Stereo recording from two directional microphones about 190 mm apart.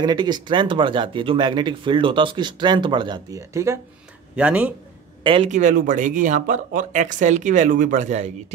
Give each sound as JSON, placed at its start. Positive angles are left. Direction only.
{"t": 0.0, "sound": "speech", "side_deg": -20}
{"t": 5.2, "sound": "a man's voice", "side_deg": -30}
{"t": 5.5, "sound": "speech", "side_deg": -40}